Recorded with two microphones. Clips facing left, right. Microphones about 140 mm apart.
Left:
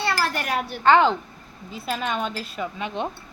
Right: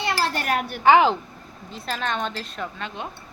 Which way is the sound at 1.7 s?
5° left (ahead or behind).